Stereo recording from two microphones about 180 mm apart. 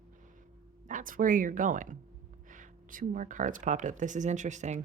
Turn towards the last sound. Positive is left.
turn(degrees=-40)  # may be behind; listen again after turning